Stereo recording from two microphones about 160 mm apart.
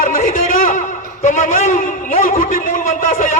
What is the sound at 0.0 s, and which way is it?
A man's voice, 55° left (ahead or behind).